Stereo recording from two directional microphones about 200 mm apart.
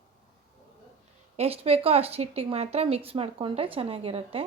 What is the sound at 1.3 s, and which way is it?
A woman's voice, 30° right (ahead or behind).